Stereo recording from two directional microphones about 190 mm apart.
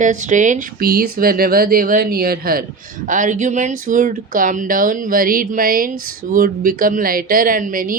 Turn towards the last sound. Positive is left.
turn(degrees=-45)  # may be behind; listen again after turning